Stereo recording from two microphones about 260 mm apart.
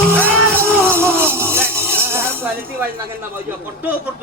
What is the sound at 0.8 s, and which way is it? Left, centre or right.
Music, centre.